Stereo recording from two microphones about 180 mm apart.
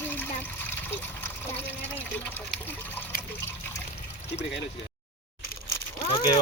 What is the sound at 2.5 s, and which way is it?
Water, 10° left (ahead or behind).